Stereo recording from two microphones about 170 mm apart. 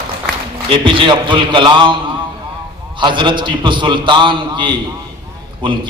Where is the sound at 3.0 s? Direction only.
25° right (ahead or behind).